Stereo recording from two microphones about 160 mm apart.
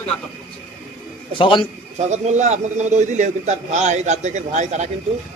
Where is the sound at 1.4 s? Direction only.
30° left (ahead or behind).